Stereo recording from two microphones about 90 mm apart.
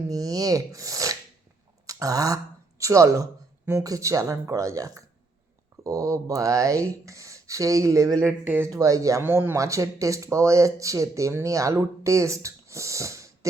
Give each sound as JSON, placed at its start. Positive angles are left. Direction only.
{"t": 0.1, "sound": "speech", "side_deg": -45}
{"t": 8.4, "sound": "speech", "side_deg": -25}
{"t": 8.7, "sound": "speech", "side_deg": -35}
{"t": 9.2, "sound": "speech", "side_deg": -25}
{"t": 9.6, "sound": "speech", "side_deg": -35}